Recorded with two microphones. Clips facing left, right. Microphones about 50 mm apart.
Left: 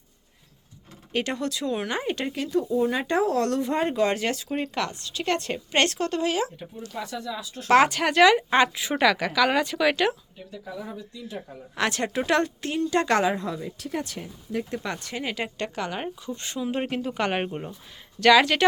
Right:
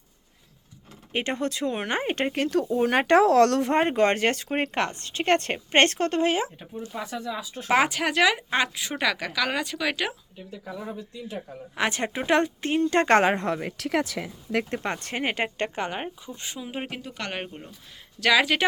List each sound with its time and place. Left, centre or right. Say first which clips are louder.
1.1 s speech: even; right
3.6 s a woman's voice: right 2 dB; right
6.8 s speech: even; centre
7.7 s speech: left 3 dB; centre
11.8 s speech: left 1 dB; right
12.7 s a woman's voice: right 3 dB; right
13.3 s speech: right 3 dB; right
14.6 s a woman's voice: right 1 dB; right
16.0 s speech: left 2 dB; centre
17.1 s speech: left 7 dB; centre
18.2 s speech: left 4 dB; centre